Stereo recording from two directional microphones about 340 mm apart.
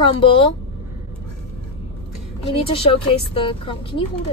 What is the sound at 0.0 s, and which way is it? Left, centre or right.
Speech, centre.